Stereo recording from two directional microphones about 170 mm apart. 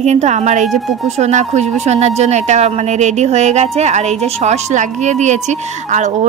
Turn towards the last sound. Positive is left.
turn(degrees=-45)  # may be behind; listen again after turning